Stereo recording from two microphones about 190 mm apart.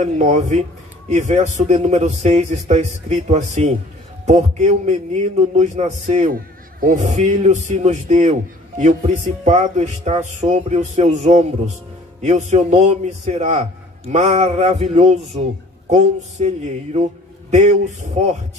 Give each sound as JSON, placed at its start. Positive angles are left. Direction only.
{"t": 0.0, "sound": "a man's voice", "side_deg": -35}